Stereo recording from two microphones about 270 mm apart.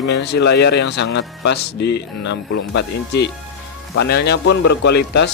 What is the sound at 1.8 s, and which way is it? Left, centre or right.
Speech, left.